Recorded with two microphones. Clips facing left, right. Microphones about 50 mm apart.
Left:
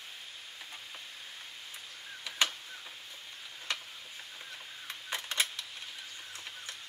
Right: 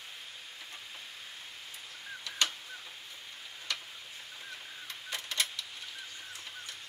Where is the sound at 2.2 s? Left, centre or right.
Centre.